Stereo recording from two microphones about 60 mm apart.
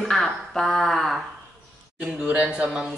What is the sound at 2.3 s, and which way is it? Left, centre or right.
Speech, right.